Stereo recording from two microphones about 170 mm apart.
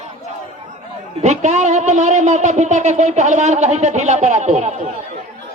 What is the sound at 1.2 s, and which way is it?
Speech, 45° right (ahead or behind).